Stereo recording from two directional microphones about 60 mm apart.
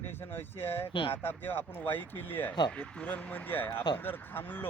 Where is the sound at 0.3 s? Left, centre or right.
Left.